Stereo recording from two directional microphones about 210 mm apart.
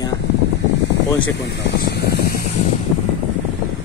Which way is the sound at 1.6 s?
55° left (ahead or behind).